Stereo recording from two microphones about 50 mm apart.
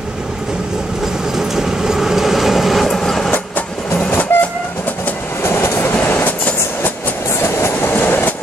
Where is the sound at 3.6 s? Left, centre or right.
Left.